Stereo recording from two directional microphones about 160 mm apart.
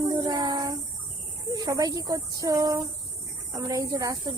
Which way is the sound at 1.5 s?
25° right (ahead or behind).